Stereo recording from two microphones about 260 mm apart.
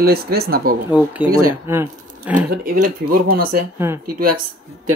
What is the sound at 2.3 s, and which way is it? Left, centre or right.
Speech, right.